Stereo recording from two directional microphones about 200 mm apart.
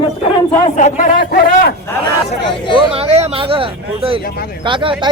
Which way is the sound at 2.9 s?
30° right (ahead or behind).